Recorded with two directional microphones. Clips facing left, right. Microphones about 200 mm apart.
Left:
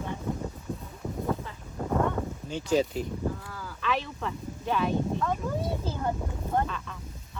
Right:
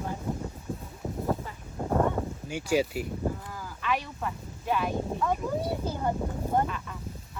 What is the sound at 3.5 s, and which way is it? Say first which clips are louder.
Speech: even; 10° right (ahead or behind).